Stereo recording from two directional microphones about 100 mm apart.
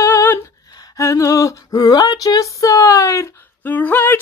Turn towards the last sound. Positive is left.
turn(degrees=20)  # may be behind; listen again after turning